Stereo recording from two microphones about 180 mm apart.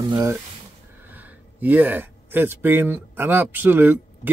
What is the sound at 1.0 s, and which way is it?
Speech, 10° right (ahead or behind).